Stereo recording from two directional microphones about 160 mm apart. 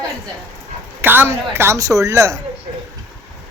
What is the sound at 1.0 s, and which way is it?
A woman's voice, 15° right (ahead or behind).